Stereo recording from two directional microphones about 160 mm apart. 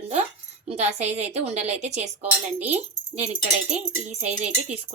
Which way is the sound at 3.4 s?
45° right (ahead or behind).